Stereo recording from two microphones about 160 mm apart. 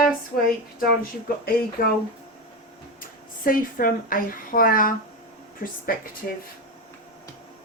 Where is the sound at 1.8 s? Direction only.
60° left (ahead or behind).